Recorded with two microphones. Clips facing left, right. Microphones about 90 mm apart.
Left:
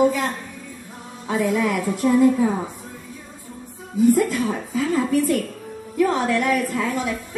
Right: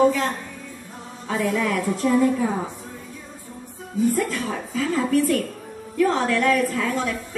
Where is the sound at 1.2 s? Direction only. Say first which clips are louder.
Left 2 dB; 15° left (ahead or behind).